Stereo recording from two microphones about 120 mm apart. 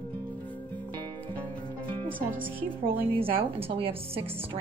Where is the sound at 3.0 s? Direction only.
50° right (ahead or behind).